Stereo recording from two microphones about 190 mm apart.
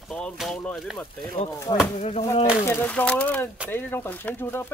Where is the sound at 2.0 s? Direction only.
30° left (ahead or behind).